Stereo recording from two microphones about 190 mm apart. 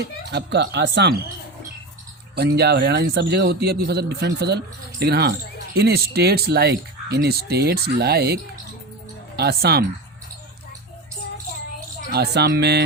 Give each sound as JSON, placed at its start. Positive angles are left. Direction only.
{"t": 0.3, "sound": "speech", "side_deg": -65}
{"t": 2.3, "sound": "speech", "side_deg": -60}
{"t": 12.1, "sound": "speech", "side_deg": -60}